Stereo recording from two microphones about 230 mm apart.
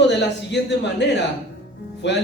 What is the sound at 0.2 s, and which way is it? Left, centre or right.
A man's voice, left.